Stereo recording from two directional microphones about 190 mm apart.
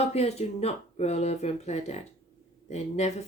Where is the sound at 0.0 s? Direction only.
35° left (ahead or behind).